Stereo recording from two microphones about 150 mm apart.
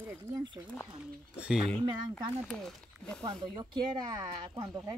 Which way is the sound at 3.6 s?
25° right (ahead or behind).